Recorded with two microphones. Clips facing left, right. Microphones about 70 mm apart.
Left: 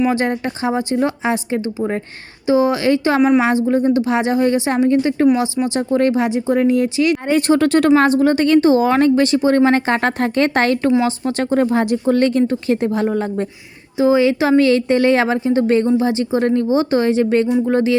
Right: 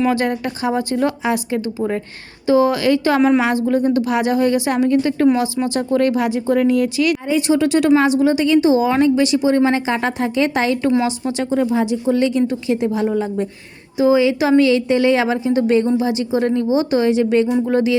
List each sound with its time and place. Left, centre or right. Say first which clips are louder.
0.1 s a woman's voice: even; left
3.2 s a woman's voice: left 2 dB; centre
3.4 s a woman's voice: left 1 dB; left
7.3 s a woman's voice: left 3 dB; left